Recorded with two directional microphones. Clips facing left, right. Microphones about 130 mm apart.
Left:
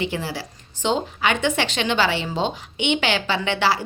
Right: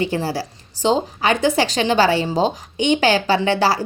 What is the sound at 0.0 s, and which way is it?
A woman's voice, 40° right (ahead or behind).